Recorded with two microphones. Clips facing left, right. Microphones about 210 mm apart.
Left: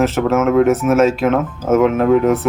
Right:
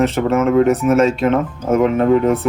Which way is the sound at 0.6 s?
Centre (ahead or behind).